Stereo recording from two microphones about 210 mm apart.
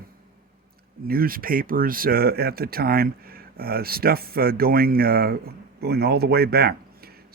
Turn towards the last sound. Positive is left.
turn(degrees=-45)  # may be behind; listen again after turning